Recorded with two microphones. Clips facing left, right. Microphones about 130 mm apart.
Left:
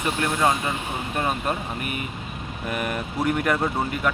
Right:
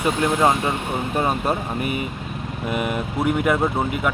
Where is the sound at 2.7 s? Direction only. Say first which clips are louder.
Right 4 dB; 15° right (ahead or behind).